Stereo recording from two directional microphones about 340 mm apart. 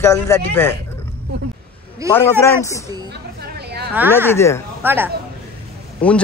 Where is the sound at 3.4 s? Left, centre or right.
Right.